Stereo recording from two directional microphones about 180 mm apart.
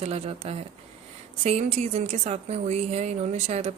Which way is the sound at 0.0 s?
35° right (ahead or behind).